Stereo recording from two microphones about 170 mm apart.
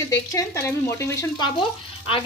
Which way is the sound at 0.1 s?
20° left (ahead or behind).